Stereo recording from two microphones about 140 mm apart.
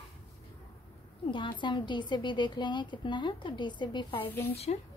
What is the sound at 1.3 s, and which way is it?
A woman's voice, 35° left (ahead or behind).